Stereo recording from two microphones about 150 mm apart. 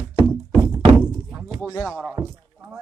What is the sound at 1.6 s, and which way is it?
Speech, 15° left (ahead or behind).